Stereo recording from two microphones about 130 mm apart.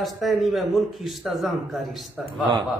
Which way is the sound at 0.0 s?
Centre (ahead or behind).